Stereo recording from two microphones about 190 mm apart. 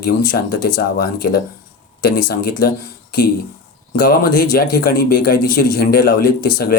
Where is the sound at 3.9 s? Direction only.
50° left (ahead or behind).